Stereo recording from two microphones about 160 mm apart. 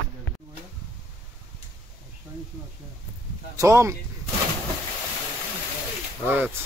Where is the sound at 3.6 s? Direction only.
20° right (ahead or behind).